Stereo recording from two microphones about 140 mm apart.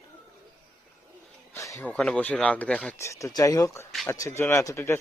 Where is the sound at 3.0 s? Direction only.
20° left (ahead or behind).